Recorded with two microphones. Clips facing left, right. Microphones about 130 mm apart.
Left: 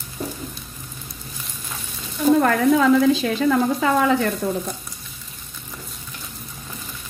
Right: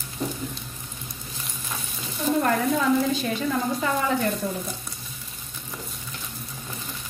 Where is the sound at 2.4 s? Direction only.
90° left.